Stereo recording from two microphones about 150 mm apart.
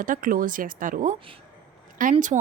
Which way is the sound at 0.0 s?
65° right (ahead or behind).